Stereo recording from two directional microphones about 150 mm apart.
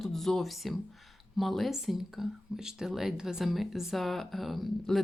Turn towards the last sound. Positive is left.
turn(degrees=0)  # may be behind; listen again after turning